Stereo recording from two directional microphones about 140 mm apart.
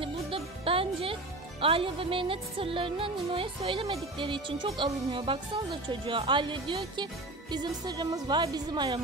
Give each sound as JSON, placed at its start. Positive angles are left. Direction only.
{"t": 0.0, "sound": "music", "side_deg": -40}
{"t": 7.5, "sound": "speech", "side_deg": -30}